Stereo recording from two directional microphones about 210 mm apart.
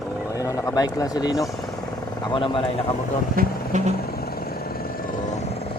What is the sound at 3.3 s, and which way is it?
Speech, 35° right (ahead or behind).